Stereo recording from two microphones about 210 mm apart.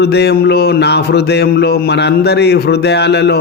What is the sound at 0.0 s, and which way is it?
A man's voice, 50° left (ahead or behind).